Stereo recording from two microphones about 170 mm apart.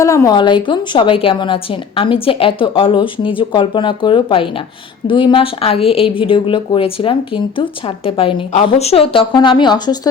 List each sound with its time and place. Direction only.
0.0 s a woman's voice: 20° left (ahead or behind)